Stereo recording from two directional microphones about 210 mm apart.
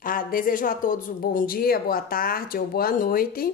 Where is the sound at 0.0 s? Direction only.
40° left (ahead or behind).